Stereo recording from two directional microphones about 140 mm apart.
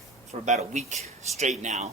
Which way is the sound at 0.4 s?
55° right (ahead or behind).